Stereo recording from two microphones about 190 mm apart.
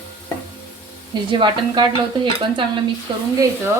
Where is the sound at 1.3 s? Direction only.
25° right (ahead or behind).